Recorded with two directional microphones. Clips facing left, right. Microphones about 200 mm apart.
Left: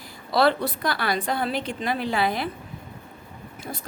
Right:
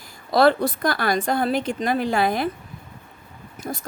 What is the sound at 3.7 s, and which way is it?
Speech, 45° right (ahead or behind).